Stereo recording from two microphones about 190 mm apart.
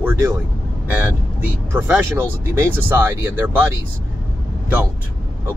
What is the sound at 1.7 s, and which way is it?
Speech, 10° right (ahead or behind).